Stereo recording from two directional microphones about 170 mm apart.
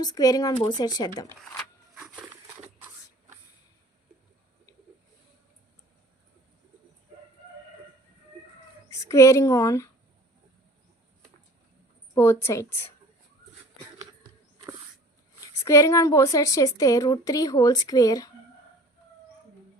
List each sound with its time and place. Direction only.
0.0 s a woman's voice: 20° left (ahead or behind)
8.9 s speech: 20° left (ahead or behind)
12.1 s a woman's voice: 15° left (ahead or behind)
15.6 s a woman's voice: 15° left (ahead or behind)